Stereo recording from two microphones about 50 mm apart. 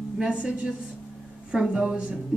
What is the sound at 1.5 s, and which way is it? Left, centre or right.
Speech, centre.